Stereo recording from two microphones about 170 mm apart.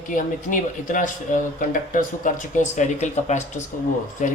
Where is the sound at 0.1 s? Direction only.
50° left (ahead or behind).